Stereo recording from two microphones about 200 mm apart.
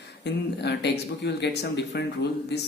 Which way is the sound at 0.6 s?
55° left (ahead or behind).